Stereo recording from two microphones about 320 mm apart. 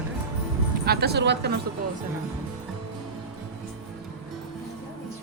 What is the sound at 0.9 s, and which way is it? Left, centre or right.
Speech, right.